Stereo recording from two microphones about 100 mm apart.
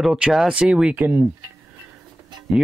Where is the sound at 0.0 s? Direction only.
5° right (ahead or behind).